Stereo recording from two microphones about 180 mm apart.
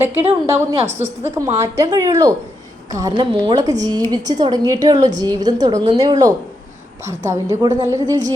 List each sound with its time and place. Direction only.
0.2 s a woman's voice: 15° right (ahead or behind)
0.9 s a woman's voice: 40° right (ahead or behind)
1.3 s a woman's voice: 15° right (ahead or behind)